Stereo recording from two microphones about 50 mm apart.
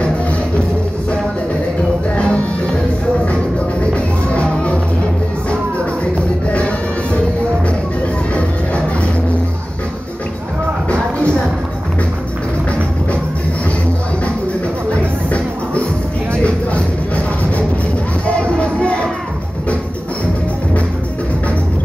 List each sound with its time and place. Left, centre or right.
2.0 s music: left
3.8 s music: left
6.5 s music: left
14.9 s music: left